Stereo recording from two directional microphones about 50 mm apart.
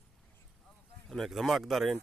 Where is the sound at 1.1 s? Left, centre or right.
Centre.